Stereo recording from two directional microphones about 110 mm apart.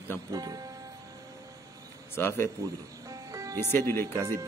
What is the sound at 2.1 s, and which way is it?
Speech, 20° left (ahead or behind).